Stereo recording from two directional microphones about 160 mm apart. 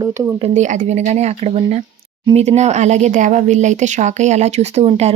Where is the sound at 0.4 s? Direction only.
45° right (ahead or behind).